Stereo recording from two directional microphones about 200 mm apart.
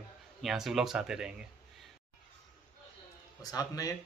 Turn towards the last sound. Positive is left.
turn(degrees=20)  # may be behind; listen again after turning